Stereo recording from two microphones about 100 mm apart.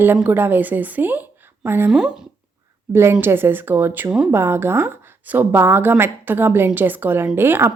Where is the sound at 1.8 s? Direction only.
10° right (ahead or behind).